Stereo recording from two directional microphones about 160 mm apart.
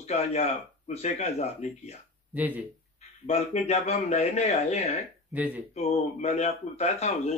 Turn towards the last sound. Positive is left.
turn(degrees=45)  # may be behind; listen again after turning